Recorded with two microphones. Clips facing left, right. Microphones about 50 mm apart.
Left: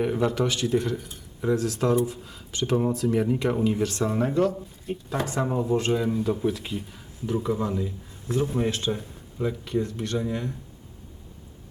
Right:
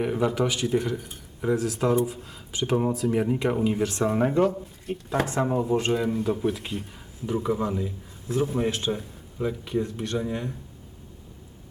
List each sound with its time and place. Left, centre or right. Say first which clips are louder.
0.0 s speech: even; centre; by 4.5 s right
5.2 s a man's voice: right 1 dB; centre
9.8 s speech: even; right
10.2 s speech: even; centre